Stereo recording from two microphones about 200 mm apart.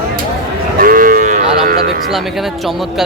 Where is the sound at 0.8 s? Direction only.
45° right (ahead or behind).